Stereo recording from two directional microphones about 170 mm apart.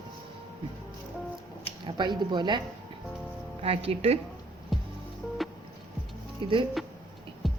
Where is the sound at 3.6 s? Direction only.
35° right (ahead or behind).